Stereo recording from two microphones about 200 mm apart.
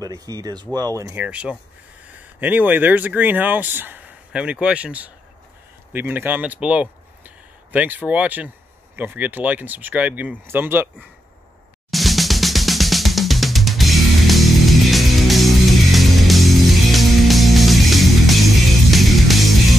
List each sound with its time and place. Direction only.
0.0 s speech: 20° right (ahead or behind)
11.9 s drum kit: centre (ahead or behind)